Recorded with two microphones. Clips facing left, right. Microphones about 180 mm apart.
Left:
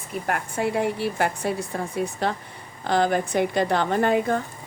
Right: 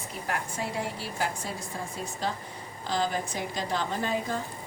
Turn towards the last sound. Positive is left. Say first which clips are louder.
# left 9 dB
turn(degrees=60)  # may be behind; listen again after turning